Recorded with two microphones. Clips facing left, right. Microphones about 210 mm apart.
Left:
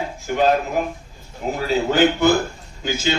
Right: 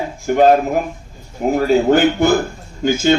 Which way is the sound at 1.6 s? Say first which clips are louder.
Right 5 dB; 50° right (ahead or behind).